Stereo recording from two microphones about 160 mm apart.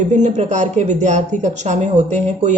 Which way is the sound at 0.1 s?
45° right (ahead or behind).